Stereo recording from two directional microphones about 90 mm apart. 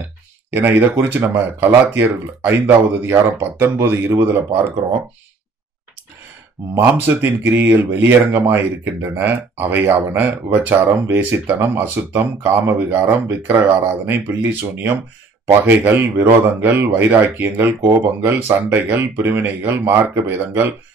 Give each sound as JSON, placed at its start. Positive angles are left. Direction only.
{"t": 0.5, "sound": "speech", "side_deg": -25}
{"t": 6.8, "sound": "speech", "side_deg": -25}